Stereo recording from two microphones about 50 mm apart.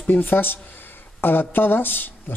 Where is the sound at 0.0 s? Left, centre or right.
Left.